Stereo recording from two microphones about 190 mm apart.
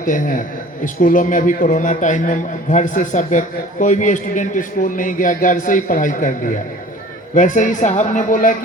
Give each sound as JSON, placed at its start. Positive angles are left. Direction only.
{"t": 0.0, "sound": "a man's voice", "side_deg": 45}